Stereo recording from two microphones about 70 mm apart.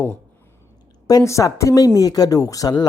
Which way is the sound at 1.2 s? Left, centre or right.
Left.